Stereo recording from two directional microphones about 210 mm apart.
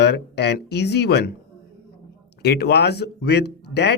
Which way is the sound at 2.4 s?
50° left (ahead or behind).